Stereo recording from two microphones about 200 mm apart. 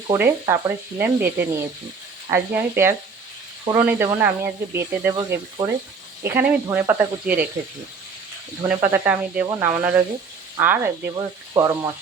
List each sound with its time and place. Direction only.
0.1 s speech: 10° right (ahead or behind)
8.6 s speech: 10° right (ahead or behind)